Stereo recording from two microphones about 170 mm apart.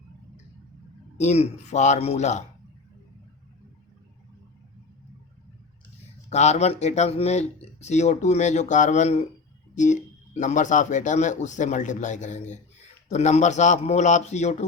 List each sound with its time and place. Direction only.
1.2 s speech: 40° left (ahead or behind)
6.3 s a man's voice: 40° left (ahead or behind)